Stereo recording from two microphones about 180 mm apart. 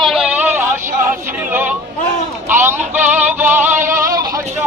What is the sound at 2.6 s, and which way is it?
Synthetic singing, 10° right (ahead or behind).